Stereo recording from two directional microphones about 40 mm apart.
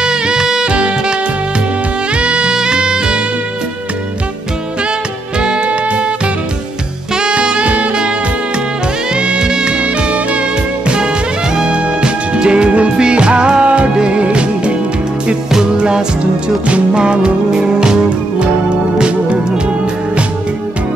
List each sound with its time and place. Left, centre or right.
0.0 s music: centre
0.7 s music: right
2.1 s music: right
5.4 s music: right
7.2 s music: right
9.1 s music: right
11.5 s music: right